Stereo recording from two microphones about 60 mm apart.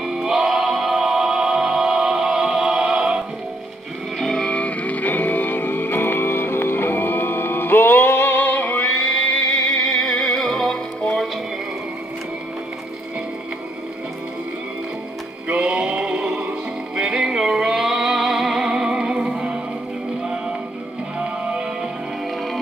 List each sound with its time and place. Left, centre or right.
0.0 s music: centre
4.2 s music: centre
4.5 s music: left
9.0 s music: centre
15.5 s music: centre
21.2 s music: centre